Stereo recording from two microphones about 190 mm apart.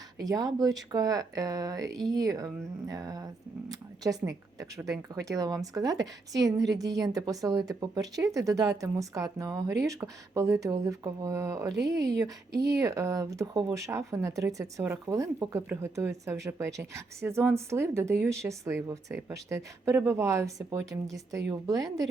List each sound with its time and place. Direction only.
0.2 s speech: 20° right (ahead or behind)
11.7 s speech: 65° right (ahead or behind)
11.9 s speech: 20° right (ahead or behind)